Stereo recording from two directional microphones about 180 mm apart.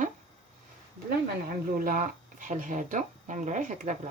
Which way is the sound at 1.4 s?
50° right (ahead or behind).